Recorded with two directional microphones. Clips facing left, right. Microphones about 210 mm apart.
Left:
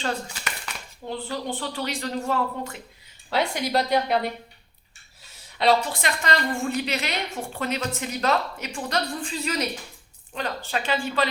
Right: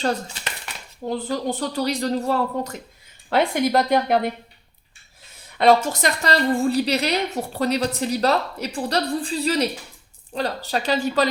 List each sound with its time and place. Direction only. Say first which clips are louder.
1.0 s a woman's voice: right 6 dB; 40° right (ahead or behind)
3.2 s a woman's voice: right 6 dB; 55° right (ahead or behind)
5.5 s a woman's voice: right 5 dB; 50° right (ahead or behind)